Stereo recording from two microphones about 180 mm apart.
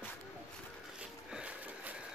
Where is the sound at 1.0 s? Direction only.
5° right (ahead or behind).